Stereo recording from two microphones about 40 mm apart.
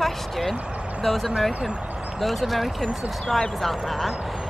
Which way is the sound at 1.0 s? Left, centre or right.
Centre.